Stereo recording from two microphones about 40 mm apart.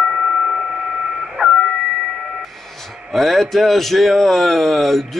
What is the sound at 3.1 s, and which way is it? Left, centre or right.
Speech, centre.